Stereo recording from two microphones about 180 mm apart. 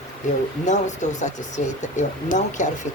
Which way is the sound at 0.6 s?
40° left (ahead or behind).